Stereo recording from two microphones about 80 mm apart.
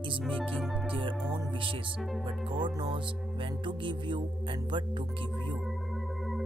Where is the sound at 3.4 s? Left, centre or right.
Right.